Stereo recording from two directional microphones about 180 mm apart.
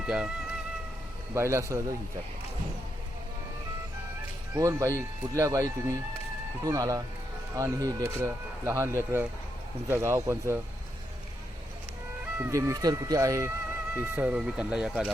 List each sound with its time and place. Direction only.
0.0 s speech: 5° right (ahead or behind)
1.3 s speech: 15° right (ahead or behind)
4.5 s speech: 15° right (ahead or behind)
12.4 s speech: 15° right (ahead or behind)